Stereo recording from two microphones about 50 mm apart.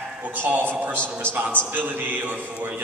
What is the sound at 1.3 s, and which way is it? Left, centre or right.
A man's voice, right.